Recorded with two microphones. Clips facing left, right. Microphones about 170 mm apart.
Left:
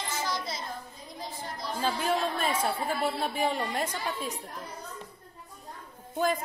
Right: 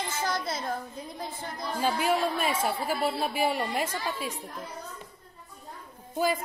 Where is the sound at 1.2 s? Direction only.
55° right (ahead or behind).